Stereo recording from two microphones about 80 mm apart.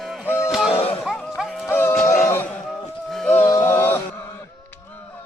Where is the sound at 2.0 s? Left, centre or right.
Left.